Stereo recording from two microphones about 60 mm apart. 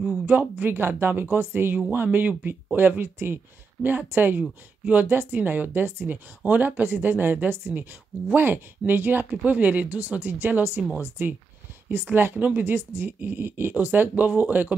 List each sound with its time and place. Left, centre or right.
0.0 s speech: right
4.4 s speech: right
5.0 s speech: right